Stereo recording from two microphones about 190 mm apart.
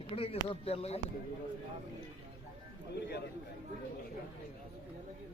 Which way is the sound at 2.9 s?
60° left (ahead or behind).